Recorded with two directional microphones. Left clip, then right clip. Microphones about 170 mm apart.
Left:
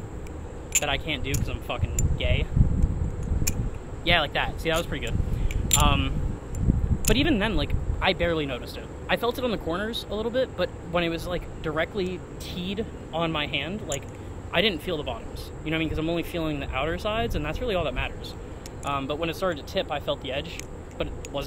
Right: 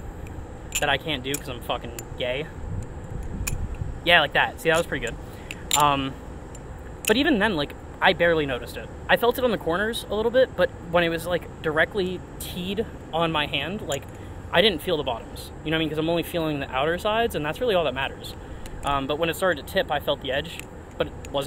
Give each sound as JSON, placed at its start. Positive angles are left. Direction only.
{"t": 0.7, "sound": "speech", "side_deg": -30}
{"t": 4.0, "sound": "speech", "side_deg": -30}